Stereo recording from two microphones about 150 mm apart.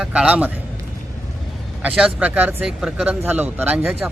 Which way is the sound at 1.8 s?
5° right (ahead or behind).